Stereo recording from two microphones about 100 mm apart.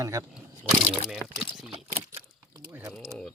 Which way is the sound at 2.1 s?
30° right (ahead or behind).